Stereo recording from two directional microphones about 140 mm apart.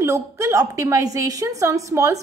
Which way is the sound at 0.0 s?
20° right (ahead or behind).